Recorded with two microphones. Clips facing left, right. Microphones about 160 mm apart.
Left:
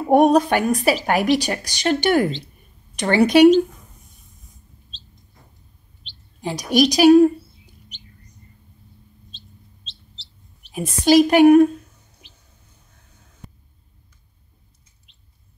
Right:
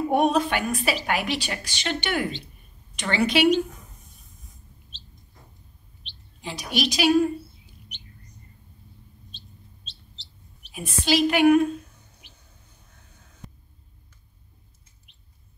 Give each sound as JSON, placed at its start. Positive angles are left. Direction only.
{"t": 0.1, "sound": "a woman's voice", "side_deg": 45}
{"t": 6.4, "sound": "a woman's voice", "side_deg": 40}
{"t": 10.7, "sound": "a woman's voice", "side_deg": 40}